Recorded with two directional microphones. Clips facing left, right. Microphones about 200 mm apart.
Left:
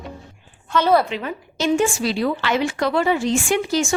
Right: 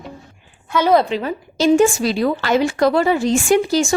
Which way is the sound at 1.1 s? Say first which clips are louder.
Right 5 dB; 35° right (ahead or behind).